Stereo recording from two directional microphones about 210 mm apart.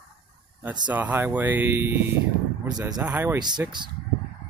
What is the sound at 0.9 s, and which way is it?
Speech, 10° right (ahead or behind).